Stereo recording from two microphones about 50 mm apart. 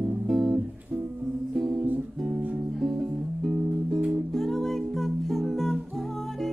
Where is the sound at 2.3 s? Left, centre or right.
Right.